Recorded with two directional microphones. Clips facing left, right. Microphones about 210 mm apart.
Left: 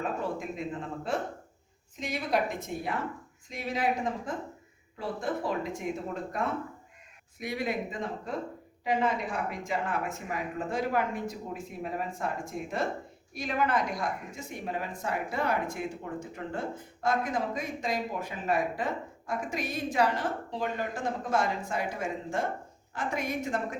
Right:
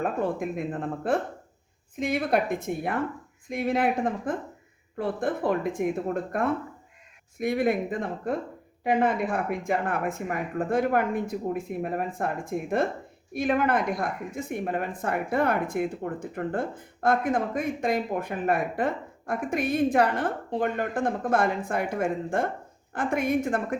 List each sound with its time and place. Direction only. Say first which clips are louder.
0.0 s speech: right 5 dB; 55° right (ahead or behind)